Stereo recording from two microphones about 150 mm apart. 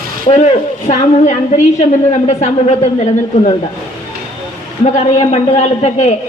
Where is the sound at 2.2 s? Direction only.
50° left (ahead or behind).